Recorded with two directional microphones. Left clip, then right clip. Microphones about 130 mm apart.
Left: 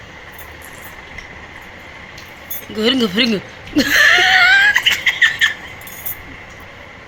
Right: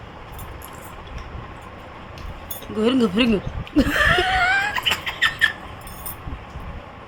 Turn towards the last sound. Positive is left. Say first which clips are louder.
# left 6 dB
turn(degrees=-5)  # may be behind; listen again after turning